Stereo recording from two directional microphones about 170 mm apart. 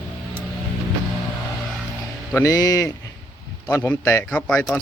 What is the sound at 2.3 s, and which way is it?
A man's voice, 20° left (ahead or behind).